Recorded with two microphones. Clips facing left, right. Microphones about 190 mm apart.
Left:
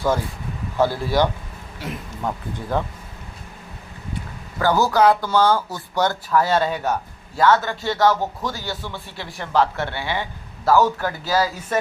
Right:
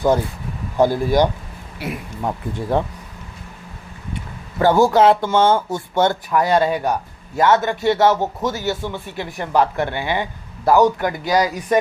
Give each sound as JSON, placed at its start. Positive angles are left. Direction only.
{"t": 0.8, "sound": "speech", "side_deg": -15}
{"t": 2.2, "sound": "speech", "side_deg": -25}
{"t": 4.6, "sound": "speech", "side_deg": -25}